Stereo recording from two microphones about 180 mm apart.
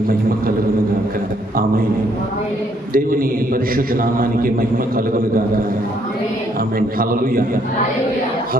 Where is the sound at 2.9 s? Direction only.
50° right (ahead or behind).